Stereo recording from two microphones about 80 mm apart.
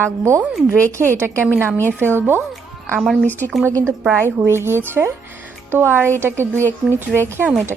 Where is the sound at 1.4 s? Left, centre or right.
Right.